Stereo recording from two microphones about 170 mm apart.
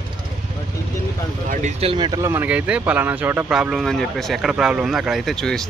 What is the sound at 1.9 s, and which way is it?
Speech, 25° right (ahead or behind).